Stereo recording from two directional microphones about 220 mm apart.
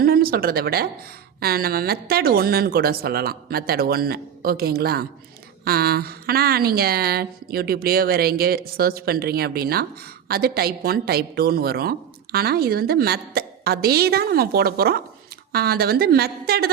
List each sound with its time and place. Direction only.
0.0 s a woman's voice: 45° right (ahead or behind)